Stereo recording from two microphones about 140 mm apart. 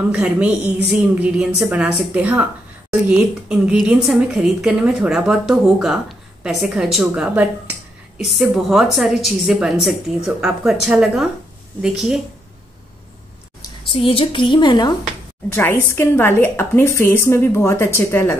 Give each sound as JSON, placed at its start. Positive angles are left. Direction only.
{"t": 0.1, "sound": "a woman's voice", "side_deg": -10}
{"t": 13.6, "sound": "a woman's voice", "side_deg": 40}
{"t": 15.5, "sound": "a woman's voice", "side_deg": 15}